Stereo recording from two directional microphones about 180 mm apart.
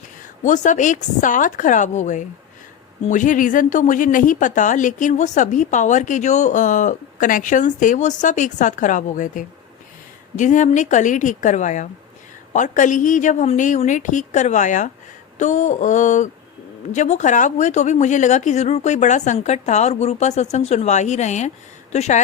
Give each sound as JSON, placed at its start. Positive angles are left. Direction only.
{"t": 0.4, "sound": "a woman's voice", "side_deg": 45}